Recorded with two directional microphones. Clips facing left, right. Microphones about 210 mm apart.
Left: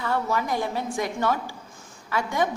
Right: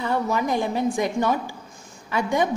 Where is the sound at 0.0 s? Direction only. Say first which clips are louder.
Right 3 dB; 15° right (ahead or behind).